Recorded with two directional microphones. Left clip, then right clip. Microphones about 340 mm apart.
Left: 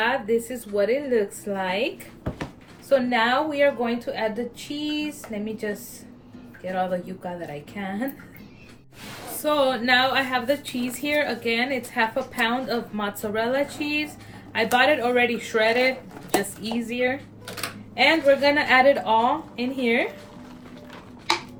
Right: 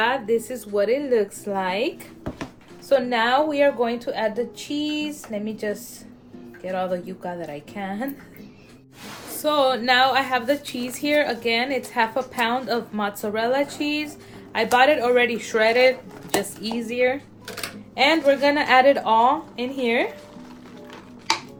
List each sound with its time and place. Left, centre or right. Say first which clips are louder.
0.0 s a woman's voice: right 1 dB; centre
2.9 s a woman's voice: right 1 dB; centre
9.4 s a woman's voice: right 2 dB; centre